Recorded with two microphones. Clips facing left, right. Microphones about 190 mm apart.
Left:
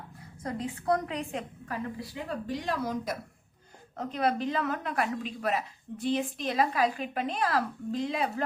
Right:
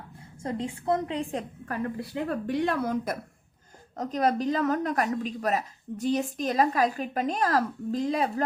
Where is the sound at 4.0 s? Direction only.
40° right (ahead or behind).